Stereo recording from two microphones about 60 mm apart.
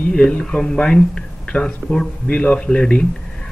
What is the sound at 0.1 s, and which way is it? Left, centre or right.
Speech, centre.